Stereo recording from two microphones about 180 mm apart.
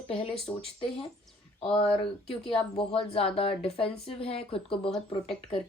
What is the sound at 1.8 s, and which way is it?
A woman's voice, 30° left (ahead or behind).